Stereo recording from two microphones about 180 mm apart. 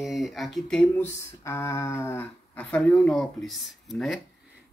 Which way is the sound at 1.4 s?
15° left (ahead or behind).